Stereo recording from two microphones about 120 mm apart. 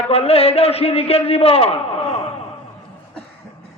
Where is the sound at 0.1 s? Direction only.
55° left (ahead or behind).